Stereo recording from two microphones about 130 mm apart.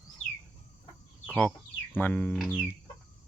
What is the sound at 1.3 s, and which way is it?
Speech, 5° left (ahead or behind).